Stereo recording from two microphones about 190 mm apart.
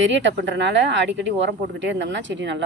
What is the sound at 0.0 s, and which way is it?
Speech, 70° right (ahead or behind).